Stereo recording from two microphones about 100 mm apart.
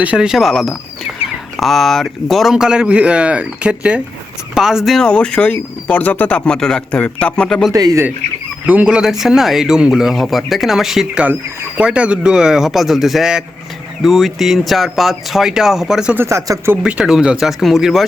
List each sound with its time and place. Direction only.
0.0 s speech: 10° right (ahead or behind); by 7.7 s 5° left (ahead or behind)
7.7 s speech: 35° right (ahead or behind)
8.6 s speech: 15° right (ahead or behind)
16.1 s speech: 30° right (ahead or behind)
16.8 s speech: 5° right (ahead or behind)